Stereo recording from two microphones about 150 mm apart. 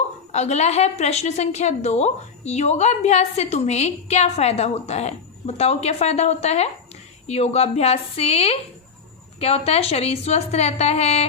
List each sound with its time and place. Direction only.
0.3 s a woman's voice: 50° left (ahead or behind)